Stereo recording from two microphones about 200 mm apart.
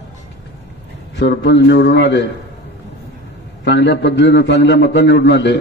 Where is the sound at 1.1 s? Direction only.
60° left (ahead or behind).